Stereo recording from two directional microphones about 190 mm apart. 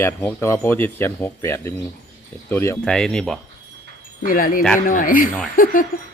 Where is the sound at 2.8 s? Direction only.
5° left (ahead or behind).